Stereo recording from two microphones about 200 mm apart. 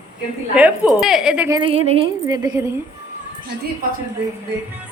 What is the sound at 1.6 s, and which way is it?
Speech, 30° right (ahead or behind).